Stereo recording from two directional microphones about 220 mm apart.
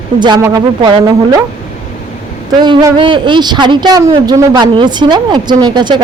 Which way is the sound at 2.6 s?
20° right (ahead or behind).